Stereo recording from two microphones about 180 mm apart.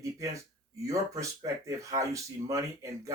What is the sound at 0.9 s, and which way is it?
Speech, 15° right (ahead or behind).